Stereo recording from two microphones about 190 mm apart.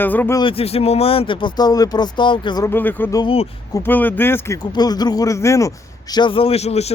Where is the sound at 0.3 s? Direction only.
30° left (ahead or behind).